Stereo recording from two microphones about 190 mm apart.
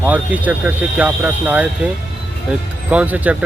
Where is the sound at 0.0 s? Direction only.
10° right (ahead or behind).